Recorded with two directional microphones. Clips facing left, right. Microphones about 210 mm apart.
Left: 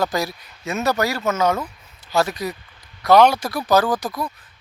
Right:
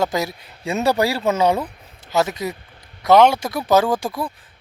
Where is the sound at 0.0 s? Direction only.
25° right (ahead or behind).